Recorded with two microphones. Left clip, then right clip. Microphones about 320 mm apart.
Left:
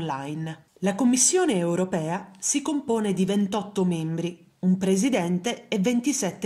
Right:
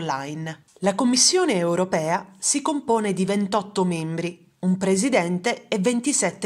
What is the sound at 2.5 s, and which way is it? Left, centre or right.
Speech, right.